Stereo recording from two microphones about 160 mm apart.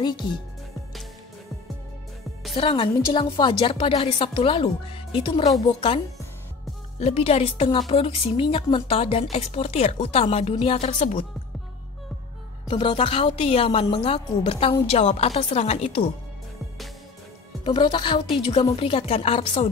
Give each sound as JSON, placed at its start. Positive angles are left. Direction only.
{"t": 0.0, "sound": "speech", "side_deg": 30}
{"t": 2.5, "sound": "a woman's voice", "side_deg": 35}
{"t": 7.0, "sound": "a woman's voice", "side_deg": 40}
{"t": 12.6, "sound": "a woman's voice", "side_deg": 30}
{"t": 17.6, "sound": "a woman's voice", "side_deg": 30}